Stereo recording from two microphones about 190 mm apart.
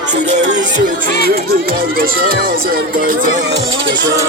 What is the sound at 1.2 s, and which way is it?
Speech, 50° right (ahead or behind).